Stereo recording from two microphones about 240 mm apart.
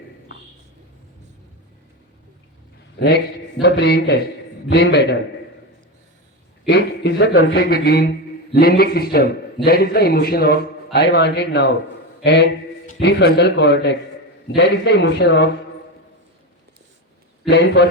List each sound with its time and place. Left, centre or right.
3.6 s a man's voice: left
6.7 s a man's voice: left
17.5 s a man's voice: left